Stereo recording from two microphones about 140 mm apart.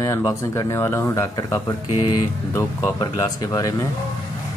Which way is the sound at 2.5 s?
25° left (ahead or behind).